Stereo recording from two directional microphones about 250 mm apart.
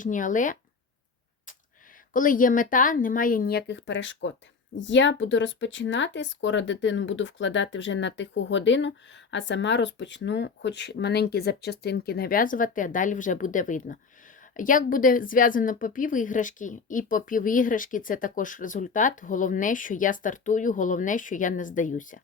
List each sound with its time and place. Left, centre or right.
0.0 s a woman's voice: left
2.1 s a woman's voice: left